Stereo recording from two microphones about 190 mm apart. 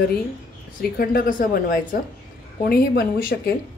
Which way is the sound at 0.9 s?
50° left (ahead or behind).